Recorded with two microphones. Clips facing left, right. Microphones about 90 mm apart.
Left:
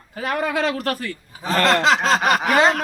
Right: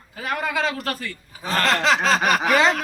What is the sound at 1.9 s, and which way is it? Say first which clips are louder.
Speech: left 1 dB; 30° left (ahead or behind).